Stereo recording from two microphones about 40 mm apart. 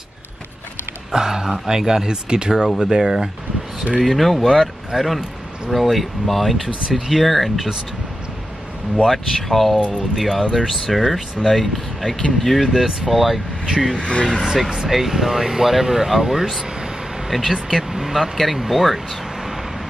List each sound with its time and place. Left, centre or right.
1.1 s speech: centre
4.0 s speech: centre
9.0 s speech: centre
12.6 s speech: centre
13.7 s speech: centre
14.0 s speech: left
14.9 s speech: centre
16.6 s vehicle: centre
17.3 s speech: centre